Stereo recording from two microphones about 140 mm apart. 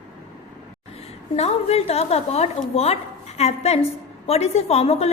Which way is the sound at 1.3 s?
50° left (ahead or behind).